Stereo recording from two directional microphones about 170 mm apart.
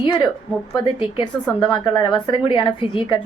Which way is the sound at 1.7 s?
25° left (ahead or behind).